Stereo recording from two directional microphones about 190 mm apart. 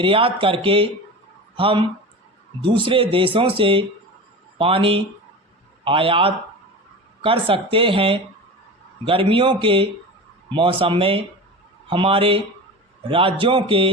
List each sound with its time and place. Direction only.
0.0 s speech: 30° right (ahead or behind)